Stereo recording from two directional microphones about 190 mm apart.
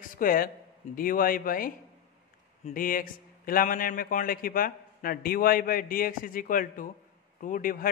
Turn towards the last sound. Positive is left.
turn(degrees=45)  # may be behind; listen again after turning